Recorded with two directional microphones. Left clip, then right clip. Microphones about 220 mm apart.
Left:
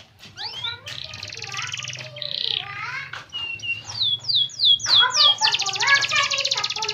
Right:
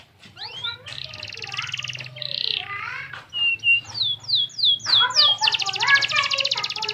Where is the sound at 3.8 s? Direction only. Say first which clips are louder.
Left 2 dB; 40° left (ahead or behind).